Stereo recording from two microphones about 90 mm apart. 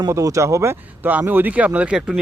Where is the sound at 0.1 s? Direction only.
35° right (ahead or behind).